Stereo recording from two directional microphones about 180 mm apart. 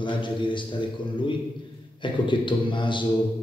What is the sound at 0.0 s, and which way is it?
A man's voice, 25° left (ahead or behind).